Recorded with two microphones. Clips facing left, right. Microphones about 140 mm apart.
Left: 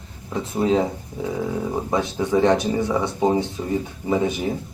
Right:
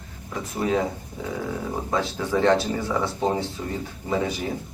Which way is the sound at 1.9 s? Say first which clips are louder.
Left 3 dB; 20° left (ahead or behind).